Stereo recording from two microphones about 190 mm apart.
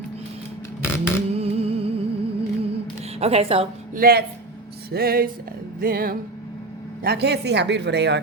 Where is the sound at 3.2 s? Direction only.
30° right (ahead or behind).